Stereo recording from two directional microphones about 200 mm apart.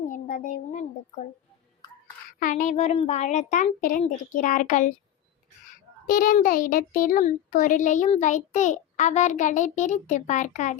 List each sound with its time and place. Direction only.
0.1 s a sound: 40° left (ahead or behind)
2.4 s a child's voice: 40° left (ahead or behind)
6.1 s a child's voice: 40° left (ahead or behind)